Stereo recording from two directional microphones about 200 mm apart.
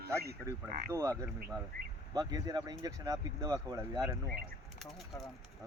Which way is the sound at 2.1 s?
20° right (ahead or behind).